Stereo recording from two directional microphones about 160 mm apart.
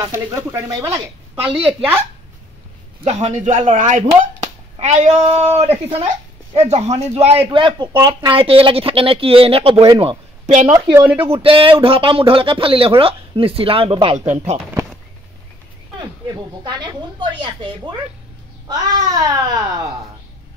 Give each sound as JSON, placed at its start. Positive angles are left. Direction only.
{"t": 0.1, "sound": "a woman's voice", "side_deg": -15}
{"t": 3.0, "sound": "speech", "side_deg": -40}
{"t": 4.2, "sound": "a sound", "side_deg": -45}
{"t": 5.2, "sound": "speech", "side_deg": -40}
{"t": 7.5, "sound": "speech", "side_deg": -30}
{"t": 10.7, "sound": "speech", "side_deg": -10}
{"t": 11.2, "sound": "speech", "side_deg": -35}
{"t": 14.1, "sound": "speech", "side_deg": -45}
{"t": 16.6, "sound": "a woman's voice", "side_deg": -30}
{"t": 18.7, "sound": "a woman's voice", "side_deg": -25}